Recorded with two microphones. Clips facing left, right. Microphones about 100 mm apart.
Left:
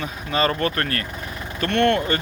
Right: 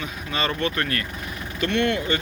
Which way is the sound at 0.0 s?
40° left (ahead or behind).